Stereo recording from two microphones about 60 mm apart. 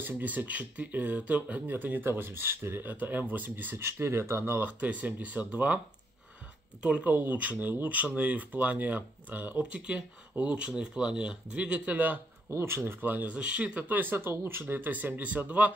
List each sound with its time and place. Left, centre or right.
0.0 s speech: right
3.8 s speech: right
4.6 s speech: right
6.8 s speech: centre
7.1 s speech: right
12.4 s speech: right; by 13.8 s centre
13.8 s speech: right